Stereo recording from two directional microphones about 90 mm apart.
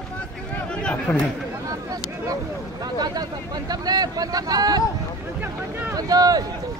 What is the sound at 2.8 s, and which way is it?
Speech, 45° right (ahead or behind).